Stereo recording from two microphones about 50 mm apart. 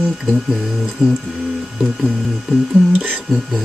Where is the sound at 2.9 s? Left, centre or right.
Right.